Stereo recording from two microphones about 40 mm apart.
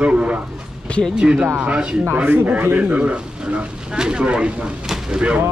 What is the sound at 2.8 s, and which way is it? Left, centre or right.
Speech, right.